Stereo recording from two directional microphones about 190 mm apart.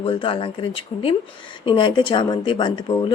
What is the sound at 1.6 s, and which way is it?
Speech, 25° left (ahead or behind).